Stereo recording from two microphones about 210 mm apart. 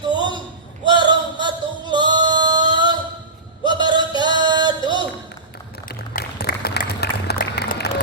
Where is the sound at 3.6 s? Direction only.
20° right (ahead or behind).